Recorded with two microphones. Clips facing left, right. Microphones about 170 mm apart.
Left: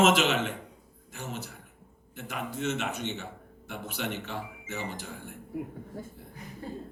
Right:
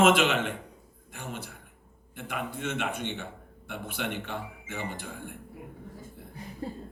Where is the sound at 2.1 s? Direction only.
55° right (ahead or behind).